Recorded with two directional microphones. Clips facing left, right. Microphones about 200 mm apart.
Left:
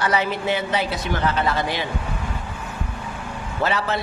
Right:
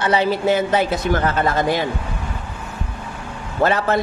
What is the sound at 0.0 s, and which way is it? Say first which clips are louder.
Speech: right 5 dB; 30° right (ahead or behind).